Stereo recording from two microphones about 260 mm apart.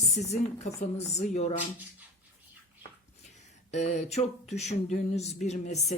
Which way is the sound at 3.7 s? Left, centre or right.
Left.